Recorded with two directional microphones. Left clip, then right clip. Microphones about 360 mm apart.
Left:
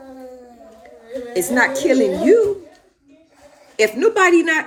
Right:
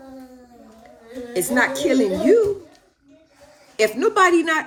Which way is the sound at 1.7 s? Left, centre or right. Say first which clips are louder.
Left 3 dB; left.